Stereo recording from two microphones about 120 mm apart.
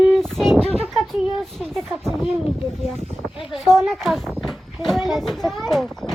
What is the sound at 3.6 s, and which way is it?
Speech, centre (ahead or behind).